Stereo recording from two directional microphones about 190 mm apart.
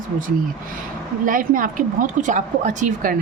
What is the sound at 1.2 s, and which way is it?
A woman's voice, 45° right (ahead or behind).